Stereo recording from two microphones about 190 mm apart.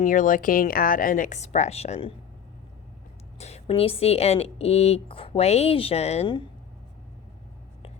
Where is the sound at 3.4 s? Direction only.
35° left (ahead or behind).